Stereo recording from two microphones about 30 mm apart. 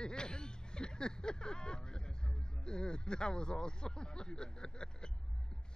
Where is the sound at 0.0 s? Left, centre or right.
Left.